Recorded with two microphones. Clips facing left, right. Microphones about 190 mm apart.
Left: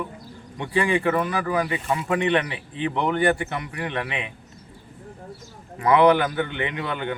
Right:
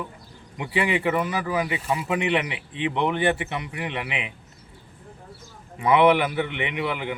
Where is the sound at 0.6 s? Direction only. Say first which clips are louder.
Left 2 dB; 5° right (ahead or behind).